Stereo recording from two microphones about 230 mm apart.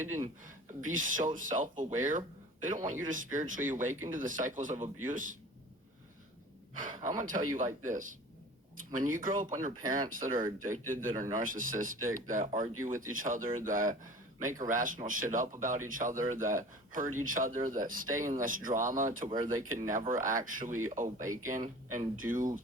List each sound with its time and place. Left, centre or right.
0.4 s speech: right
6.7 s speech: right
19.3 s speech: centre
19.7 s speech: right